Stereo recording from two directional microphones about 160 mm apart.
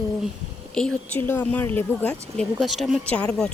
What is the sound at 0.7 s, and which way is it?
Speech, 10° left (ahead or behind).